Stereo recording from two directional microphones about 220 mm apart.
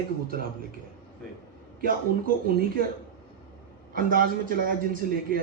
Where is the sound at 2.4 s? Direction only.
40° right (ahead or behind).